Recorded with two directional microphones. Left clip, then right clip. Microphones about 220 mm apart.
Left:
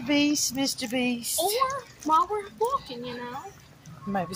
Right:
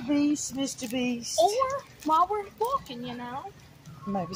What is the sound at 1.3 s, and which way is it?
Speech, 30° right (ahead or behind).